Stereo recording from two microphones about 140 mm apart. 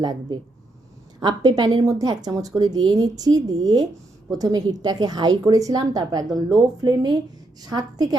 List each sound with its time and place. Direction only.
0.0 s a woman's voice: 30° right (ahead or behind)